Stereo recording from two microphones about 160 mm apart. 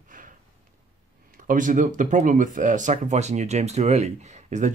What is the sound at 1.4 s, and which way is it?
Speech, 55° right (ahead or behind).